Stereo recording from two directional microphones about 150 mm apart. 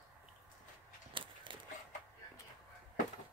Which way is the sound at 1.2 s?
35° right (ahead or behind).